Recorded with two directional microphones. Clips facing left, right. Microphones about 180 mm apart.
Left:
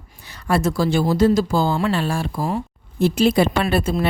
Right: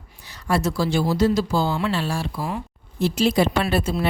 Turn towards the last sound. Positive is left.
turn(degrees=55)  # may be behind; listen again after turning